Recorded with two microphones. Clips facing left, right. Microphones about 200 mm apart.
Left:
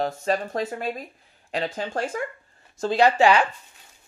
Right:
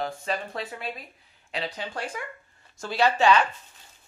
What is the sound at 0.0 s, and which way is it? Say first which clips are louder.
Speech: left 6 dB; 45° left (ahead or behind).